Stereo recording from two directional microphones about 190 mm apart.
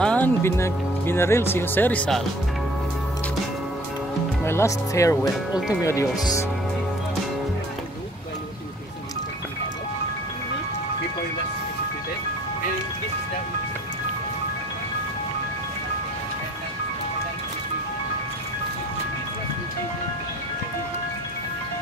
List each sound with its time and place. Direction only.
0.0 s speech: 10° left (ahead or behind)
4.5 s speech: 15° left (ahead or behind)